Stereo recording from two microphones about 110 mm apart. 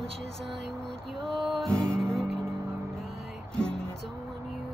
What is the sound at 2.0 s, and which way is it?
Music, centre (ahead or behind).